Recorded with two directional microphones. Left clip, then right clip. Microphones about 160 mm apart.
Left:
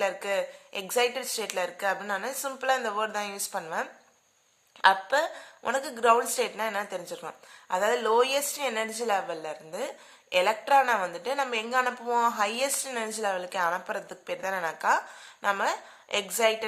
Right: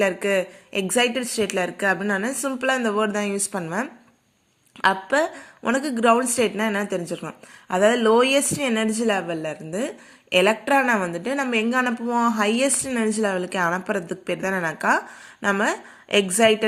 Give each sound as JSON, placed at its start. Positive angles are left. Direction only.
{"t": 0.0, "sound": "a woman's voice", "side_deg": -20}